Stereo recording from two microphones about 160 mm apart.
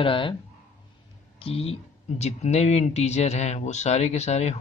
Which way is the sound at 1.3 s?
35° left (ahead or behind).